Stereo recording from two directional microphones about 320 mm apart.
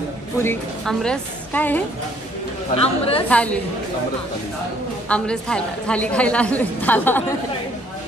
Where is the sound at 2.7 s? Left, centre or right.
Centre.